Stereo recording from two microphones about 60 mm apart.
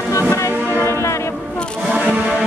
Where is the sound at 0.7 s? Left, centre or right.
Left.